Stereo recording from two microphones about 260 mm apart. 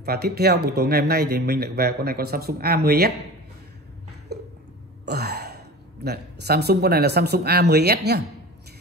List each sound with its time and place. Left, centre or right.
0.0 s speech: right
4.3 s a sound: right
5.0 s throat clearing: right
6.0 s speech: right